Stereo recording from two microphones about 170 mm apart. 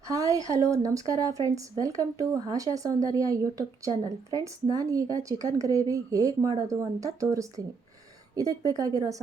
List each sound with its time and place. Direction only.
0.1 s speech: 20° right (ahead or behind)